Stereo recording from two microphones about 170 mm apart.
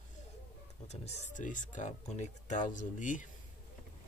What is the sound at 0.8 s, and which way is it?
Speech, 40° left (ahead or behind).